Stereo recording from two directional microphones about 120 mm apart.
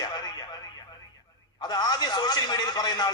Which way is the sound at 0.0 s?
35° left (ahead or behind).